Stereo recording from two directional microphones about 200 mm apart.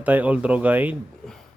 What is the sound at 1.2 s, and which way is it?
Speech, 5° left (ahead or behind).